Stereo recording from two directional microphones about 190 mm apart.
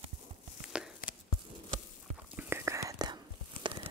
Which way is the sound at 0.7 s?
5° right (ahead or behind).